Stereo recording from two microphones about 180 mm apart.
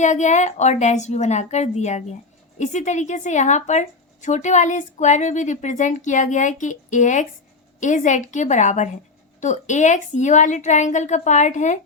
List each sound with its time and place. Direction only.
0.0 s a woman's voice: 40° left (ahead or behind)